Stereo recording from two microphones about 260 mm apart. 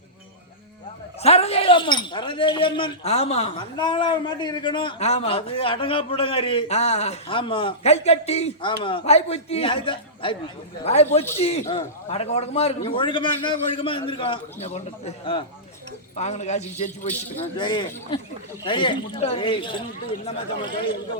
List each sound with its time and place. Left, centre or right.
1.2 s speech: left